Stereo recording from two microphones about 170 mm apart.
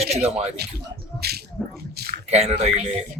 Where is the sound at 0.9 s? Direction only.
70° right (ahead or behind).